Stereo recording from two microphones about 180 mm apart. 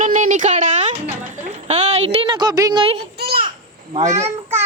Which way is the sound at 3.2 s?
60° right (ahead or behind).